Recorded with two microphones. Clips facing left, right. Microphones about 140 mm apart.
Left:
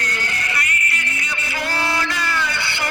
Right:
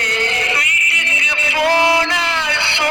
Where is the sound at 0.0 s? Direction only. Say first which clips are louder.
Right 6 dB; 90° right.